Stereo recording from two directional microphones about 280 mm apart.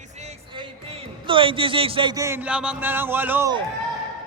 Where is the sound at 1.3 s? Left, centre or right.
Centre.